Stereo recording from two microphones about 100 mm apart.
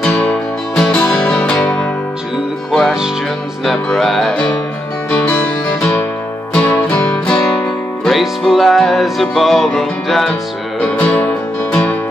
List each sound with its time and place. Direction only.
0.0 s music: 15° left (ahead or behind)
3.6 s speech: centre (ahead or behind)
5.1 s guitar: 10° left (ahead or behind)
5.8 s music: 20° left (ahead or behind)
8.0 s music: centre (ahead or behind)